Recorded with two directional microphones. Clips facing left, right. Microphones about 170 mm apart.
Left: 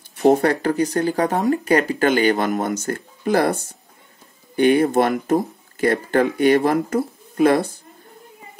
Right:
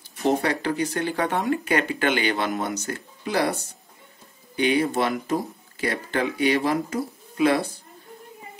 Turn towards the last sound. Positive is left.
turn(degrees=50)  # may be behind; listen again after turning